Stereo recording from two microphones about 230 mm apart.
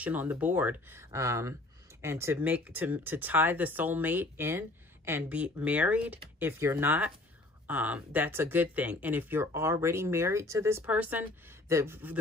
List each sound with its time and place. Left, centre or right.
0.0 s speech: centre